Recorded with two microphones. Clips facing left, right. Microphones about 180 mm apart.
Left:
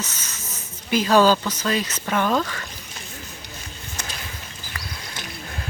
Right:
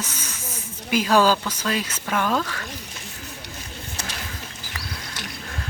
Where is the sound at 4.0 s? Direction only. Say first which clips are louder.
Even; 30° right (ahead or behind).